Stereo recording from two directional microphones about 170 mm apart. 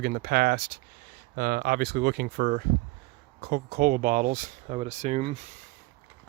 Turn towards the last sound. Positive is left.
turn(degrees=-40)  # may be behind; listen again after turning